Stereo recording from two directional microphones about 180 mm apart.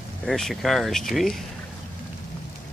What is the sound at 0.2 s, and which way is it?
Speech, centre (ahead or behind).